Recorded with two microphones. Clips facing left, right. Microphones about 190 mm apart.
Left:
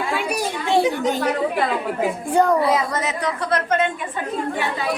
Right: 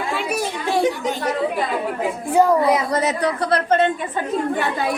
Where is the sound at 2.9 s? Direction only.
35° right (ahead or behind).